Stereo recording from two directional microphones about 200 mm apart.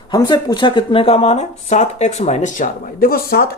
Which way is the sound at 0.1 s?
20° left (ahead or behind).